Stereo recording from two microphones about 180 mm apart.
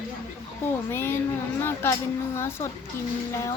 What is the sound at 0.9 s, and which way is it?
Speech, 15° left (ahead or behind).